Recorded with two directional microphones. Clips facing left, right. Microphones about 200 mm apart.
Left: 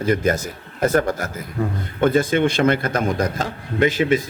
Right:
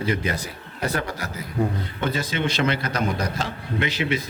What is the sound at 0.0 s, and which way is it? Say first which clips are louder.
A man's voice: left 6 dB; 45° left (ahead or behind).